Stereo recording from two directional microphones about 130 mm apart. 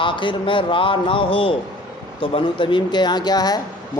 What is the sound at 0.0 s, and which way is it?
A man's voice, 40° left (ahead or behind).